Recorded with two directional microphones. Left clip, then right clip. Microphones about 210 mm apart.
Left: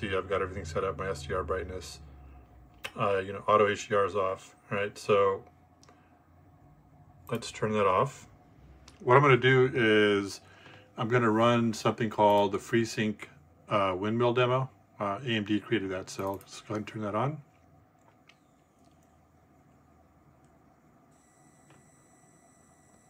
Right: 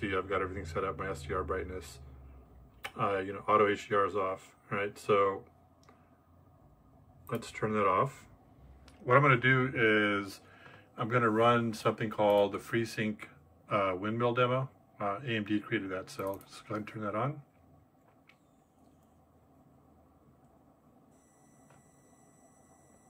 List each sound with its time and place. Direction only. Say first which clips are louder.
0.0 s speech: left 2 dB; 10° left (ahead or behind)
7.2 s speech: left 3 dB; 10° left (ahead or behind)